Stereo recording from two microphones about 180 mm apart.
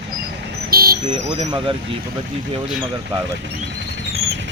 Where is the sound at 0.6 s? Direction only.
55° right (ahead or behind).